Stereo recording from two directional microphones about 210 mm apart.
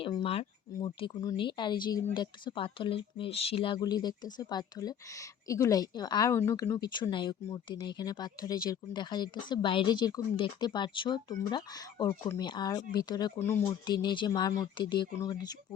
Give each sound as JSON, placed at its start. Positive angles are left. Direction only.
{"t": 0.0, "sound": "speech", "side_deg": 25}